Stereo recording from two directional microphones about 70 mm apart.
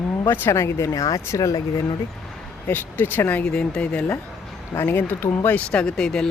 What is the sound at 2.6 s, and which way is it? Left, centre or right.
Speech, left.